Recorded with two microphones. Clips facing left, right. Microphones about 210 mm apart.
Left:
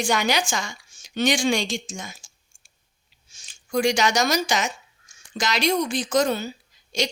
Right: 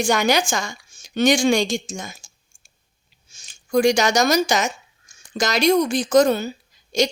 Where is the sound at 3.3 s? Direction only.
45° right (ahead or behind).